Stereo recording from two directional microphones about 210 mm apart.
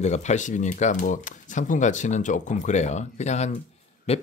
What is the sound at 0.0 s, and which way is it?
Speech, 35° left (ahead or behind).